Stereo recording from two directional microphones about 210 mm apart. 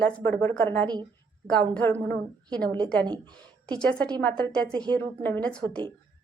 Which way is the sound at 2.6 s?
20° right (ahead or behind).